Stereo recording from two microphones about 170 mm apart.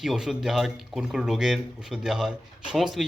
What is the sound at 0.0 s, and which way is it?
Speech, centre (ahead or behind).